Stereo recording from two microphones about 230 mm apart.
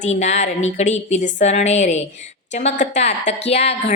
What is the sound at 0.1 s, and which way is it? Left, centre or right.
A woman's voice, left.